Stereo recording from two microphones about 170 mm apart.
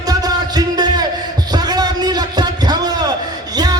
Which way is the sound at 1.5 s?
25° right (ahead or behind).